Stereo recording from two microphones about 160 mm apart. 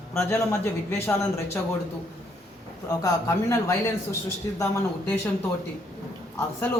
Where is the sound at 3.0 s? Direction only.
20° left (ahead or behind).